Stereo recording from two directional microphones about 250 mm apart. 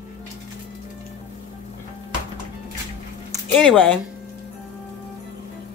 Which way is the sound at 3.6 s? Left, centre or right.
Centre.